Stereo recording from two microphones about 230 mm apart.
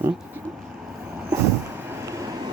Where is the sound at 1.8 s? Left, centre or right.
Centre.